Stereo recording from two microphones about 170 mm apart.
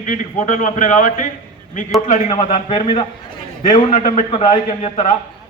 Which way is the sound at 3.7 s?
50° left (ahead or behind).